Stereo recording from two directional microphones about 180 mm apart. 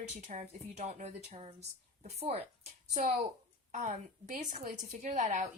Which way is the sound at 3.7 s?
40° right (ahead or behind).